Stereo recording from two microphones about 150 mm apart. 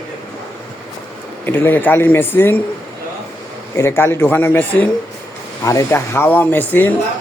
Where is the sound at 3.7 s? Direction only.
15° left (ahead or behind).